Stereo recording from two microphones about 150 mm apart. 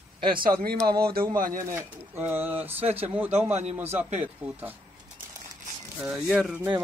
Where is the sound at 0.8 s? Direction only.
90° right.